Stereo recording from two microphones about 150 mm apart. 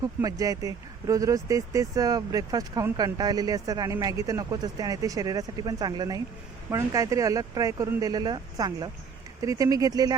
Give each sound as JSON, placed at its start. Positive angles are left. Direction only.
{"t": 0.0, "sound": "speech", "side_deg": -25}